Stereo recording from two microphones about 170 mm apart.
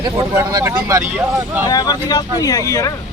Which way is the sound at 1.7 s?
25° left (ahead or behind).